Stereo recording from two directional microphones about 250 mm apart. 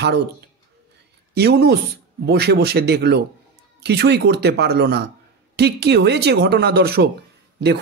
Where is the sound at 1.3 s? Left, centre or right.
Right.